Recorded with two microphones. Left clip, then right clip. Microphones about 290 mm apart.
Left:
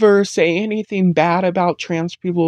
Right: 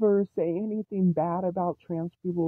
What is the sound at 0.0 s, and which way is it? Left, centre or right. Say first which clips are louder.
Speech: left 12 dB; right.